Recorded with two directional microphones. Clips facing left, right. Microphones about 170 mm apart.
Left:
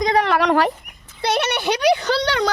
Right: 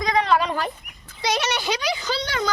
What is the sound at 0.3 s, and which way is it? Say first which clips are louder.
Speech: left 5 dB; 75° left (ahead or behind).